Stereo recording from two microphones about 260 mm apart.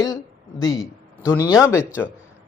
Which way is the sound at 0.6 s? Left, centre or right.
Left.